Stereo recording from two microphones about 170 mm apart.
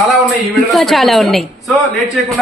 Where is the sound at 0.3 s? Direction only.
Centre (ahead or behind).